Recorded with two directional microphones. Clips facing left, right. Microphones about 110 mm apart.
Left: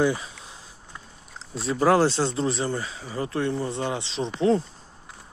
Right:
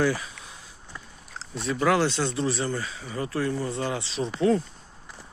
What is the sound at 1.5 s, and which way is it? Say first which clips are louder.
Speech: left 3 dB; 30° left (ahead or behind).